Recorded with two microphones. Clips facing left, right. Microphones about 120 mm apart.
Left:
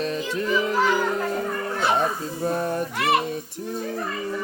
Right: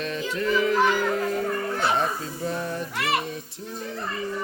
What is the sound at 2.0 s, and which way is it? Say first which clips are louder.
Speech: left 2 dB; 45° left (ahead or behind).